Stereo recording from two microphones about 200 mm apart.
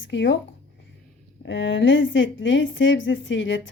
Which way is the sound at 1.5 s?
65° left (ahead or behind).